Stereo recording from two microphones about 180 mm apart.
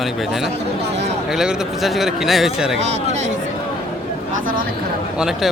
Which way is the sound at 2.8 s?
40° right (ahead or behind).